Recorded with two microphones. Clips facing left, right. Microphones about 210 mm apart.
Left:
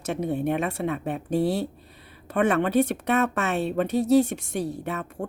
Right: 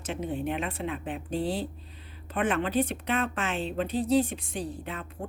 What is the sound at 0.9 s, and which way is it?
Speech, 45° left (ahead or behind).